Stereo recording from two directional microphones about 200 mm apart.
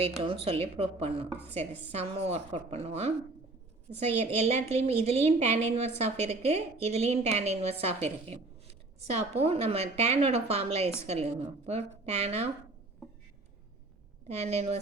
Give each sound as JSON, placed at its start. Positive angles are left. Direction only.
{"t": 0.0, "sound": "a woman's voice", "side_deg": -30}
{"t": 14.3, "sound": "a woman's voice", "side_deg": -30}